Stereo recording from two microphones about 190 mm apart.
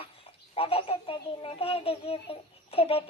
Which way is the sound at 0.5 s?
30° left (ahead or behind).